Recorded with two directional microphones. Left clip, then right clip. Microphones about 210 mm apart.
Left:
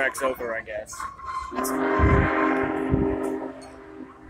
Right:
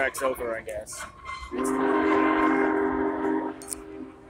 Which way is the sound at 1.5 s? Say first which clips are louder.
Even; 50° left (ahead or behind).